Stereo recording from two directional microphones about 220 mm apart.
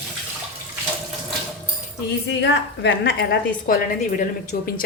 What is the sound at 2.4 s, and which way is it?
A woman's voice, 55° left (ahead or behind).